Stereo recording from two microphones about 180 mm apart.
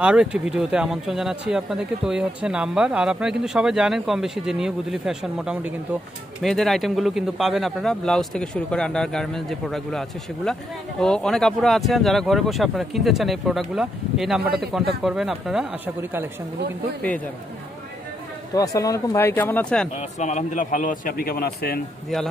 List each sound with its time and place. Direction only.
0.0 s a man's voice: 5° right (ahead or behind)
18.5 s speech: 20° left (ahead or behind)
20.0 s speech: 40° left (ahead or behind); by 21.8 s 60° left (ahead or behind)